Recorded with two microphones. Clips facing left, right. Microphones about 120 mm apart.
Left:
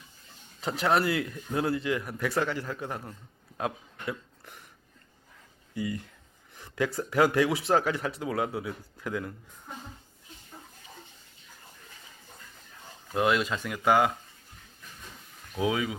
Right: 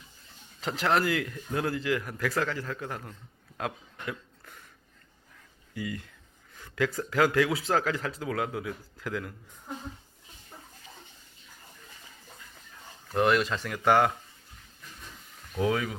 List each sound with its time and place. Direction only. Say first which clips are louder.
0.6 s speech: left 1 dB; 10° left (ahead or behind)
3.6 s a sound: left 2 dB; 15° left (ahead or behind)
5.7 s speech: left 3 dB; 25° left (ahead or behind)
13.1 s speech: right 1 dB; 15° left (ahead or behind)
15.5 s speech: even; 15° left (ahead or behind)